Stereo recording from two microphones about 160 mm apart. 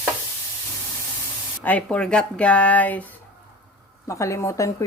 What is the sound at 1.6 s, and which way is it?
Speech, 10° left (ahead or behind).